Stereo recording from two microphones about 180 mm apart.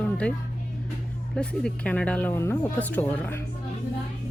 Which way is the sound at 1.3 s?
5° left (ahead or behind).